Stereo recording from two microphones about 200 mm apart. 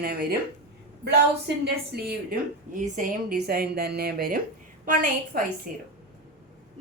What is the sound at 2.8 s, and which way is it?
A woman's voice, 40° right (ahead or behind).